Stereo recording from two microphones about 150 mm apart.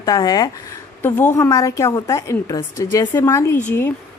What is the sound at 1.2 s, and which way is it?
A woman's voice, 15° left (ahead or behind).